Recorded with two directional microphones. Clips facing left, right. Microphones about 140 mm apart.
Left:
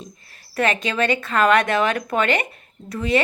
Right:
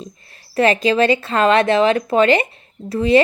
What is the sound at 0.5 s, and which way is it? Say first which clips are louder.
Speech: right 7 dB; 30° right (ahead or behind).